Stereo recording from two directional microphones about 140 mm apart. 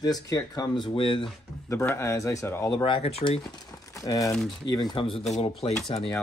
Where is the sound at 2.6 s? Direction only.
35° left (ahead or behind).